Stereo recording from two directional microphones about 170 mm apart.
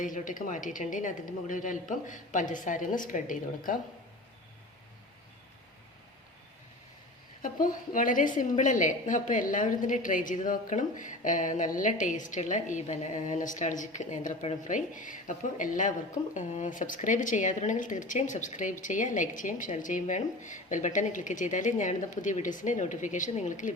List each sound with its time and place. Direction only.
0.0 s a woman's voice: 50° left (ahead or behind)
7.4 s a woman's voice: 55° left (ahead or behind)